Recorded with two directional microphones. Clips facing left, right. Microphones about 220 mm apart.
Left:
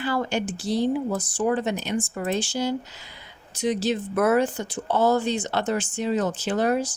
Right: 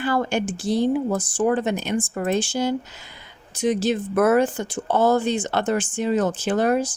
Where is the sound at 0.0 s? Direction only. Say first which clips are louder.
Right 3 dB; 50° right (ahead or behind).